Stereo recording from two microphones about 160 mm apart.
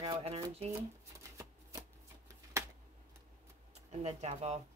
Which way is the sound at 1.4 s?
15° right (ahead or behind).